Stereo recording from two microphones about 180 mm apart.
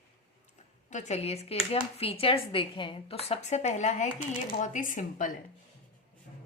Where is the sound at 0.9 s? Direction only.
40° left (ahead or behind).